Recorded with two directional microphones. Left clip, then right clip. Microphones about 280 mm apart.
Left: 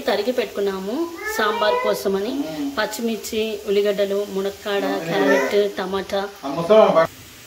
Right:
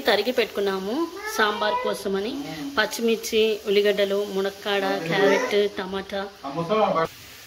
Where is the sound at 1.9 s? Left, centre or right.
Centre.